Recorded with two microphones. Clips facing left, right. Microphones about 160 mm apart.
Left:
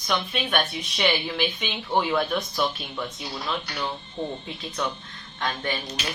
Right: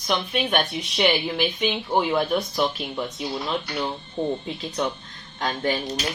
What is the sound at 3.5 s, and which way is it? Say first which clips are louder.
Speech: even; 25° right (ahead or behind).